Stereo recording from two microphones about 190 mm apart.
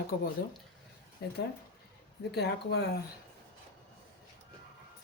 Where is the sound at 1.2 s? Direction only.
60° left (ahead or behind).